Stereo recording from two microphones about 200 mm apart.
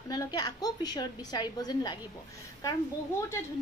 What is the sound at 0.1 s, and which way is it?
A woman's voice, 20° left (ahead or behind).